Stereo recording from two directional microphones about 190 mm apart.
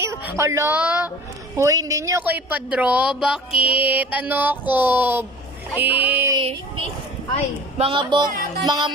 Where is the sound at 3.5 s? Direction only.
30° left (ahead or behind).